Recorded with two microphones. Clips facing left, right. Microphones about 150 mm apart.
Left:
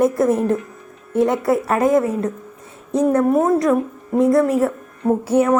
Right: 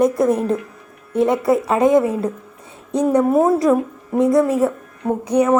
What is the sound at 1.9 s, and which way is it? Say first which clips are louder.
Speech: right 1 dB; 25° right (ahead or behind).